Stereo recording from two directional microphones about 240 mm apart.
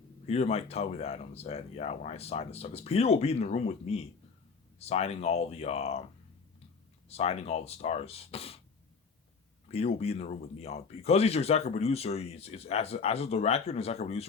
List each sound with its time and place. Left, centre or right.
0.3 s speech: left
7.1 s speech: left
9.7 s speech: left